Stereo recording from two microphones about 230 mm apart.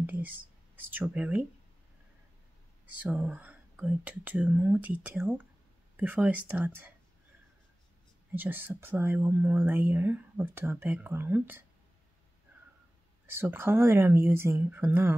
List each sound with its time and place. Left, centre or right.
0.0 s speech: centre
3.0 s speech: centre
8.4 s speech: centre
13.3 s speech: centre